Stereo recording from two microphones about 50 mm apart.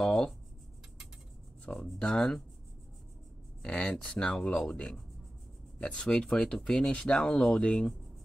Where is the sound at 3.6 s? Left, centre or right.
Left.